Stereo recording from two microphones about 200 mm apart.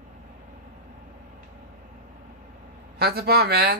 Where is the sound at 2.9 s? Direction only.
50° right (ahead or behind).